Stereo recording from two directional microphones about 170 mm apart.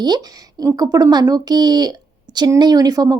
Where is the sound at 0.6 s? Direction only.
20° right (ahead or behind).